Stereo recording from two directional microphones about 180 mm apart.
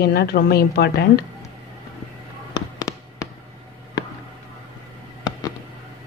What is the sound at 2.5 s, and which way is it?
Fireworks, 20° left (ahead or behind).